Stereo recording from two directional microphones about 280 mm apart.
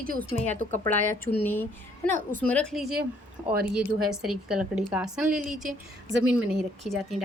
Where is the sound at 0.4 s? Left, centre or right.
Right.